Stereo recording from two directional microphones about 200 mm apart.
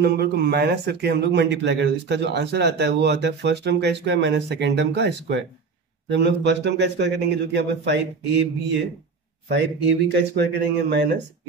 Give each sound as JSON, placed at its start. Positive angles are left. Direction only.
{"t": 0.0, "sound": "speech", "side_deg": -55}
{"t": 9.5, "sound": "speech", "side_deg": -60}